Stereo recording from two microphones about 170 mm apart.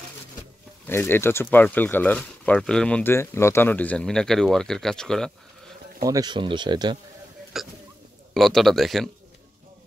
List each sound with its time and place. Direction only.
0.8 s speech: 15° left (ahead or behind)
6.0 s speech: 25° right (ahead or behind)
7.5 s speech: centre (ahead or behind)